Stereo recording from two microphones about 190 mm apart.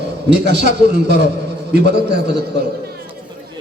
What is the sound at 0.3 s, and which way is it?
A man's voice, 60° right (ahead or behind).